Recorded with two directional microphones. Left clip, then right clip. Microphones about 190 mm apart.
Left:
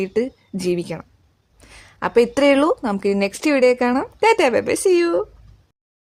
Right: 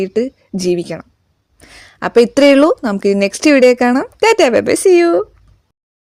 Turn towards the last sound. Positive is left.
turn(degrees=-25)  # may be behind; listen again after turning